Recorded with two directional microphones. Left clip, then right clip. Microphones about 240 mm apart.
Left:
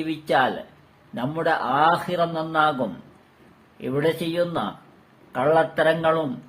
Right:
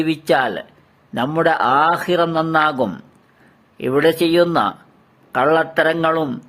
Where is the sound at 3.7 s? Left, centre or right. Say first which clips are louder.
Right 8 dB; right.